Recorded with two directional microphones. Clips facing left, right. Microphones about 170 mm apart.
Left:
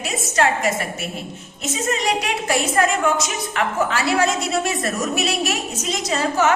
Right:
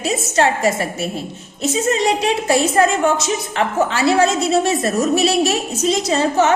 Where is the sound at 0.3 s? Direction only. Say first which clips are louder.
Right 3 dB; 30° right (ahead or behind).